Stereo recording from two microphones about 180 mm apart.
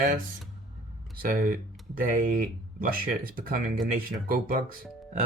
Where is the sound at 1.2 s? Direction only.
55° right (ahead or behind).